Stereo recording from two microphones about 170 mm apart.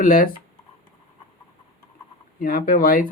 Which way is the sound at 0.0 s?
55° left (ahead or behind).